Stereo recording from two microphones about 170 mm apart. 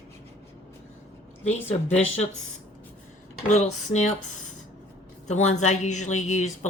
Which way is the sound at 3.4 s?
45° left (ahead or behind).